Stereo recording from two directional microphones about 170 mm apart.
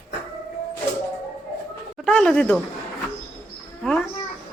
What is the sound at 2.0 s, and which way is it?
Speech, 5° left (ahead or behind).